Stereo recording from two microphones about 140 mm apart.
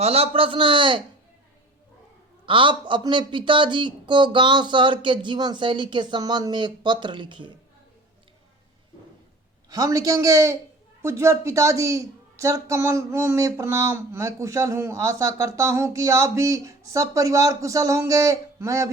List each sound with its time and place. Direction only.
0.0 s a man's voice: 45° right (ahead or behind)
2.5 s a man's voice: 35° right (ahead or behind)
9.6 s a woman's voice: 25° right (ahead or behind)